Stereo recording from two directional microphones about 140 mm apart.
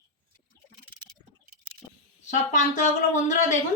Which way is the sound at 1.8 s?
25° left (ahead or behind).